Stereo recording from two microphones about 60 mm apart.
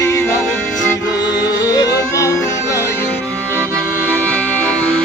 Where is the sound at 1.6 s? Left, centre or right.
Left.